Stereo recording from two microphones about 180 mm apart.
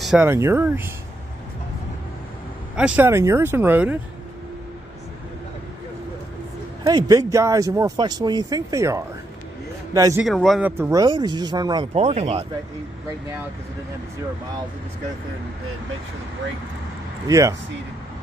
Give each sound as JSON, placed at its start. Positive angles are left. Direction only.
{"t": 0.0, "sound": "speech", "side_deg": -5}
{"t": 0.3, "sound": "speech", "side_deg": -15}
{"t": 2.7, "sound": "speech", "side_deg": -10}
{"t": 6.8, "sound": "speech", "side_deg": -20}
{"t": 10.2, "sound": "speech", "side_deg": 0}
{"t": 10.6, "sound": "speech", "side_deg": -15}
{"t": 11.9, "sound": "speech", "side_deg": -35}
{"t": 17.3, "sound": "speech", "side_deg": -15}